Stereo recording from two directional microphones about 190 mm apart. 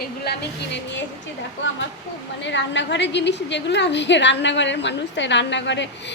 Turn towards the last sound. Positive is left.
turn(degrees=70)  # may be behind; listen again after turning